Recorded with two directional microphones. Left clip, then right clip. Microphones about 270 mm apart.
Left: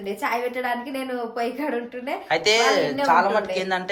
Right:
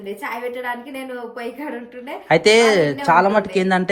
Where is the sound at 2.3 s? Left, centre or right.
Right.